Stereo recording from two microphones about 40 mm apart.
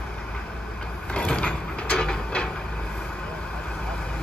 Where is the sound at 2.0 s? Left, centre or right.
Left.